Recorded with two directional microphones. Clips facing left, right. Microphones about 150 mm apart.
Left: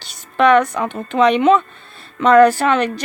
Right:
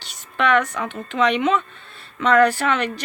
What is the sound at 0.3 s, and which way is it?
Speech, 35° left (ahead or behind).